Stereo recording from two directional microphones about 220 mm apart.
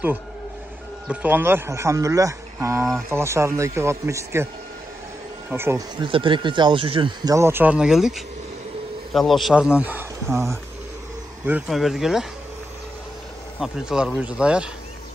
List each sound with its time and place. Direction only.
1.0 s speech: 5° right (ahead or behind)
5.5 s speech: 10° right (ahead or behind)
13.6 s speech: 5° right (ahead or behind)